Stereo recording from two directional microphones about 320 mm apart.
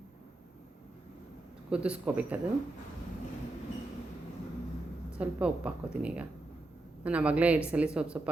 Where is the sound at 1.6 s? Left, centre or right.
Centre.